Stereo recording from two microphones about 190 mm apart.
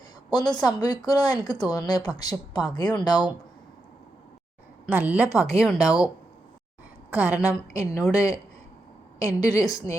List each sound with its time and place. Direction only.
0.3 s speech: 20° left (ahead or behind)
4.9 s a woman's voice: 5° right (ahead or behind)
5.7 s speech: 20° left (ahead or behind)
7.1 s a woman's voice: 5° right (ahead or behind)
8.1 s a woman's voice: 15° left (ahead or behind)